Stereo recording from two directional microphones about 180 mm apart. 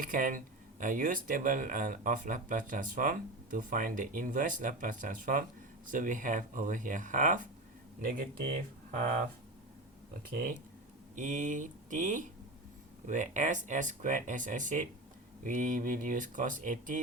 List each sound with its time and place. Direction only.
0.0 s speech: 50° right (ahead or behind)
11.1 s speech: 45° right (ahead or behind)